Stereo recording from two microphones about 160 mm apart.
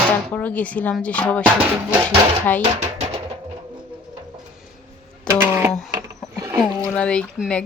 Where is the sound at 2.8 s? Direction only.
45° right (ahead or behind).